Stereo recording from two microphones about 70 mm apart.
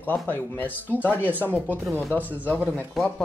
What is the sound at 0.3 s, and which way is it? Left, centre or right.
Speech, left.